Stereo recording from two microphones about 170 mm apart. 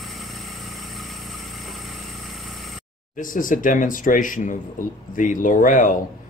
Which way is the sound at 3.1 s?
50° left (ahead or behind).